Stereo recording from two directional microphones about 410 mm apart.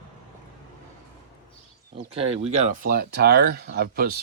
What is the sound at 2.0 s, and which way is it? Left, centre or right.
Speech, centre.